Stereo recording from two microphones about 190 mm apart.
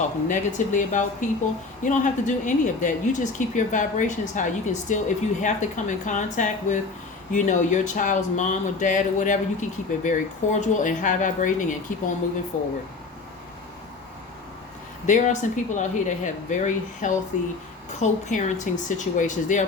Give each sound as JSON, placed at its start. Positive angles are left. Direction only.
{"t": 0.3, "sound": "a woman's voice", "side_deg": 40}
{"t": 15.0, "sound": "a woman's voice", "side_deg": 40}